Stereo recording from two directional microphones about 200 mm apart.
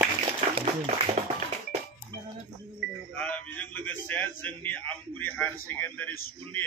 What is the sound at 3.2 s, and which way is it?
A man's voice, 5° left (ahead or behind).